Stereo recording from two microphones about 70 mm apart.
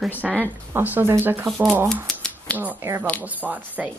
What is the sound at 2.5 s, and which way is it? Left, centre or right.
Speech, right.